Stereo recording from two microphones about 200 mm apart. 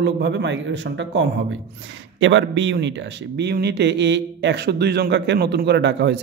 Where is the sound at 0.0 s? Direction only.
60° right (ahead or behind).